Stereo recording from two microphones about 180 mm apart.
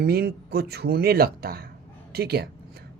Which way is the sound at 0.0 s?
60° right (ahead or behind).